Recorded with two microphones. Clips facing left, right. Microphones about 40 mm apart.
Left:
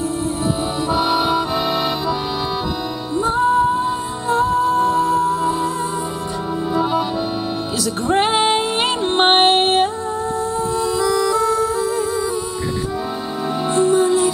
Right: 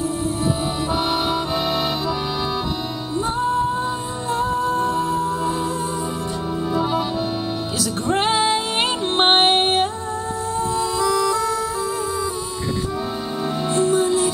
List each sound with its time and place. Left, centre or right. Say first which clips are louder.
0.9 s accordion: left 5 dB; centre
4.3 s music: left 5 dB; centre
6.7 s music: left 3 dB; centre
8.3 s music: left 2 dB; left
9.0 s music: left 3 dB; centre
13.7 s music: left 3 dB; centre